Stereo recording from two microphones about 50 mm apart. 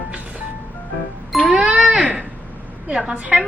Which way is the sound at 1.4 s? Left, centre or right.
Centre.